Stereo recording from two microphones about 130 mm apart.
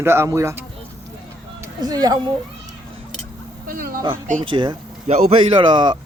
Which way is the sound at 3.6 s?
90° right.